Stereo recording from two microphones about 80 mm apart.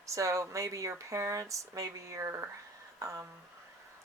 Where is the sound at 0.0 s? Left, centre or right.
Right.